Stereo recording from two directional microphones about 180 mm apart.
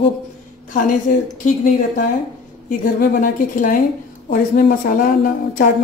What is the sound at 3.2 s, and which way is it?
A woman's voice, 50° left (ahead or behind).